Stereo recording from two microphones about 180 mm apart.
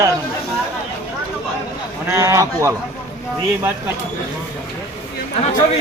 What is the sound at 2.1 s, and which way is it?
Speech, 15° right (ahead or behind).